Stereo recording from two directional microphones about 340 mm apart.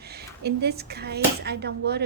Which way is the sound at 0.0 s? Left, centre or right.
Right.